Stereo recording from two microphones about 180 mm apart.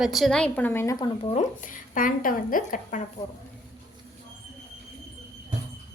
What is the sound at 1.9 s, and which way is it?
Speech, 50° left (ahead or behind).